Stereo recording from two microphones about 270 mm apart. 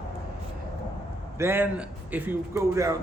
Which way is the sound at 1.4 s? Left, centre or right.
Centre.